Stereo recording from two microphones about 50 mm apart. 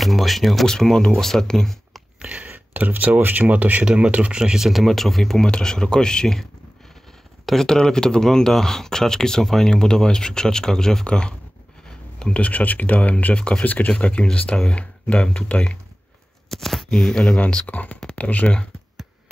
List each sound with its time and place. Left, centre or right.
0.0 s speech: centre
0.7 s speech: centre
2.1 s a sound: right
2.4 s speech: right
3.8 s speech: right
4.8 s speech: centre
7.4 s speech: centre; by 15.8 s left
16.4 s shuffling cards: centre
16.9 s speech: centre
17.6 s speech: left